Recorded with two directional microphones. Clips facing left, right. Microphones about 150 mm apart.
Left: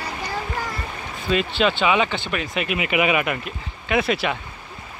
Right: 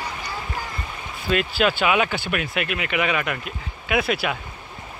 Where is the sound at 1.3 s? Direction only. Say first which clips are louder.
Left 1 dB; 5° right (ahead or behind).